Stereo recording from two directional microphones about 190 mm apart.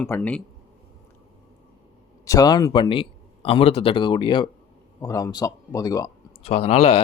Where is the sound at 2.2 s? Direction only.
20° left (ahead or behind).